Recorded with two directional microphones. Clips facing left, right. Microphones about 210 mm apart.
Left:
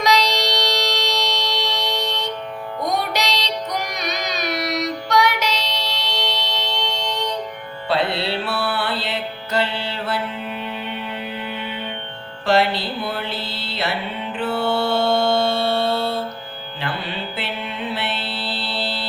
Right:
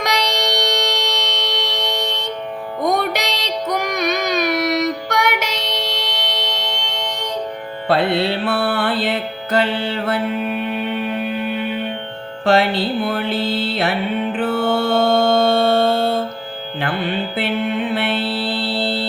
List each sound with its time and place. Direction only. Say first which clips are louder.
0.0 s music: left 1 dB; 55° right (ahead or behind)
12.5 s mantra: right 3 dB; 50° right (ahead or behind)
14.3 s music: right 1 dB; 50° right (ahead or behind)
17.3 s music: right 9 dB; 55° right (ahead or behind)